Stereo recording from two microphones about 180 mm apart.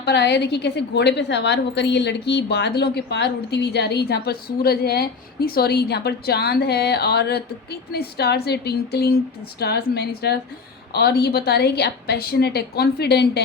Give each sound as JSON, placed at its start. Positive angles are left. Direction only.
{"t": 0.0, "sound": "a woman's voice", "side_deg": 70}